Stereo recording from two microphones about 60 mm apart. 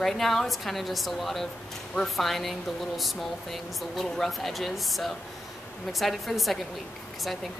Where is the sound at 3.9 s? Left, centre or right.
Centre.